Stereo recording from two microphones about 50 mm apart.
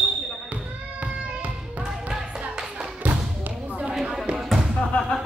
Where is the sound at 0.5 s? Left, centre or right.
Right.